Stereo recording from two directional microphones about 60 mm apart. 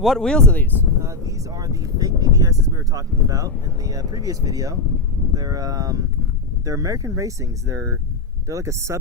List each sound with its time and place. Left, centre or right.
0.0 s speech: centre
0.3 s speech: centre
1.0 s speech: right